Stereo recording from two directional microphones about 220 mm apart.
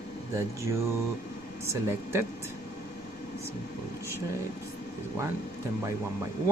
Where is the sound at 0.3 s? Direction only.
15° right (ahead or behind).